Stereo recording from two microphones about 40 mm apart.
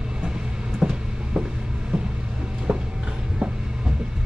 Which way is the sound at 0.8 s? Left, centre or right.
Centre.